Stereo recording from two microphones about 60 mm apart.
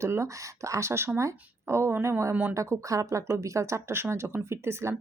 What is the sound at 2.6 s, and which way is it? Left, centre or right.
Speech, right.